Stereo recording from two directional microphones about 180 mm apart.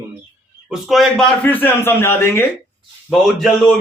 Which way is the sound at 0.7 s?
Centre (ahead or behind).